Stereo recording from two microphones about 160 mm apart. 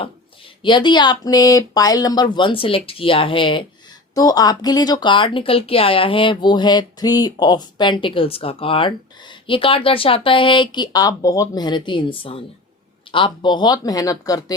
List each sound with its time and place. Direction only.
0.6 s a woman's voice: 30° left (ahead or behind)